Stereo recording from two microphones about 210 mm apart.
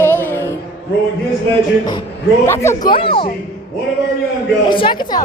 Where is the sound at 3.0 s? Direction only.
25° left (ahead or behind).